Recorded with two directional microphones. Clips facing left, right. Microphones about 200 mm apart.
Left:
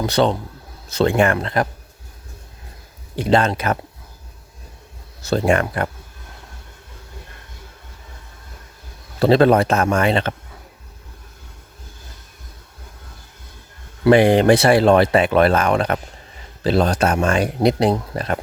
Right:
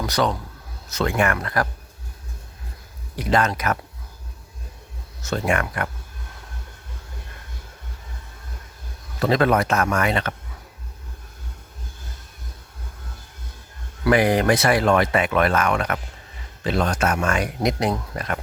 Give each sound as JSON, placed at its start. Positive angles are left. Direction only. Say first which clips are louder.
{"t": 0.0, "sound": "a man's voice", "louder": "left 5 dB", "side_deg": 25}
{"t": 3.2, "sound": "a man's voice", "louder": "left 4 dB", "side_deg": 30}
{"t": 5.2, "sound": "speech", "louder": "left 6 dB", "side_deg": 35}
{"t": 9.1, "sound": "a man's voice", "louder": "left 6 dB", "side_deg": 30}
{"t": 14.0, "sound": "speech", "louder": "left 6 dB", "side_deg": 30}